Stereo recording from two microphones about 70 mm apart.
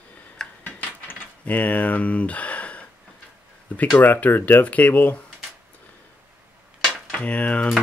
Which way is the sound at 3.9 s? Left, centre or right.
Left.